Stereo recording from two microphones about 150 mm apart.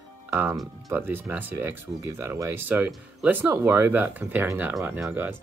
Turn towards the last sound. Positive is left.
turn(degrees=-15)  # may be behind; listen again after turning